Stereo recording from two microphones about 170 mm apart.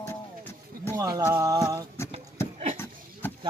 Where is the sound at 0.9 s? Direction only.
20° right (ahead or behind).